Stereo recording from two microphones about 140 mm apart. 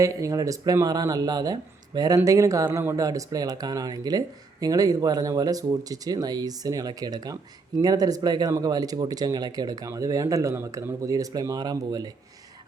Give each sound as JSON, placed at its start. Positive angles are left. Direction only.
{"t": 0.0, "sound": "speech", "side_deg": -25}